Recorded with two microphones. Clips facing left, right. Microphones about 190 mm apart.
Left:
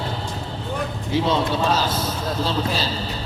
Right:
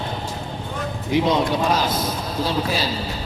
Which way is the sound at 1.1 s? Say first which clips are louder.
Right 2 dB; 15° right (ahead or behind).